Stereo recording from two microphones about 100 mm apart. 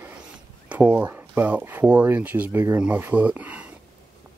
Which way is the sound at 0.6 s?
15° right (ahead or behind).